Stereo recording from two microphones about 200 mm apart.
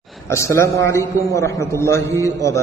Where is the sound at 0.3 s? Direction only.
15° left (ahead or behind).